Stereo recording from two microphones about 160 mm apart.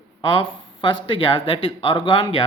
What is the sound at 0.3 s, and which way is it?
Speech, 30° left (ahead or behind).